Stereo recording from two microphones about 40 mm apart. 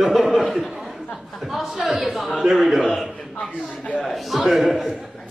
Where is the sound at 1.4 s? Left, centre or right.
Centre.